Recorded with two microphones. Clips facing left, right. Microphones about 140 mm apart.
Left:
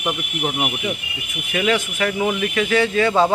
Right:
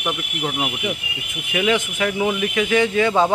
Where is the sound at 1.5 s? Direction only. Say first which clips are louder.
Even; 15° right (ahead or behind).